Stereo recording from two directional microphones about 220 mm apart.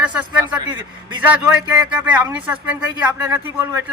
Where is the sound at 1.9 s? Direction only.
5° right (ahead or behind).